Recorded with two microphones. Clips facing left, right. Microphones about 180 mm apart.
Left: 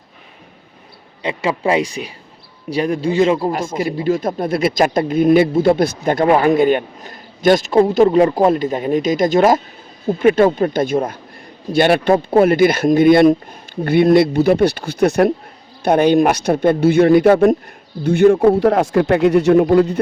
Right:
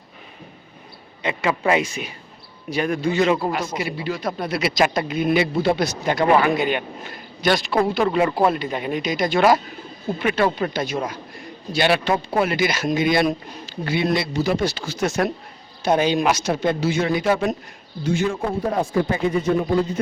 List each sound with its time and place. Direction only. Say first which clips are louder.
1.2 s a man's voice: left 3 dB; 30° left (ahead or behind)
3.8 s speech: left 8 dB; 40° left (ahead or behind); by 20.0 s 65° left (ahead or behind)